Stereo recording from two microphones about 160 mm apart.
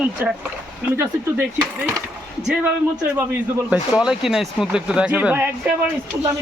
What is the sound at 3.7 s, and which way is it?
Speech, 5° right (ahead or behind).